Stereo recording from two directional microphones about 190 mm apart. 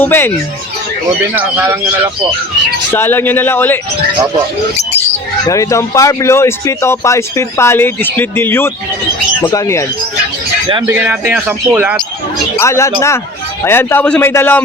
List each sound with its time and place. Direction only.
0.0 s speech: 10° left (ahead or behind)
1.3 s speech: 10° right (ahead or behind)
2.9 s speech: 10° left (ahead or behind)
5.5 s speech: 15° left (ahead or behind)
10.8 s speech: 10° right (ahead or behind)
12.5 s speech: 15° left (ahead or behind)